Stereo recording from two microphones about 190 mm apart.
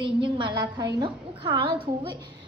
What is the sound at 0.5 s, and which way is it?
A child's voice, 20° right (ahead or behind).